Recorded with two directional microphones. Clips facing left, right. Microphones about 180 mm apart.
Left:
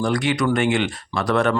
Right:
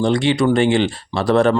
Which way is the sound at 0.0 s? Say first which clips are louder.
Right 5 dB; 25° right (ahead or behind).